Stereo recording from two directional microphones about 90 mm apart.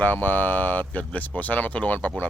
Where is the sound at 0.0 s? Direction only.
20° left (ahead or behind).